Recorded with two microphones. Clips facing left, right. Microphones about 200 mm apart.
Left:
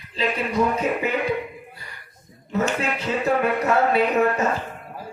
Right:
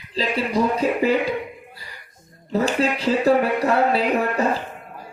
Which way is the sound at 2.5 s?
35° right (ahead or behind).